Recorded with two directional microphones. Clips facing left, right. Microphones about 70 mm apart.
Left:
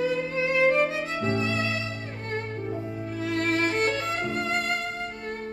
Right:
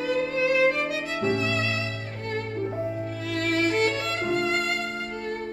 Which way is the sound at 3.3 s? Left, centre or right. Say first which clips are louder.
Right 1 dB; left.